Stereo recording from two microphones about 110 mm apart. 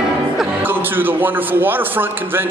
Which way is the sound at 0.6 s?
20° right (ahead or behind).